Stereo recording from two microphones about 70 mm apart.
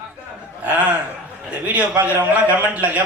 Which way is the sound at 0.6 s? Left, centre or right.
Right.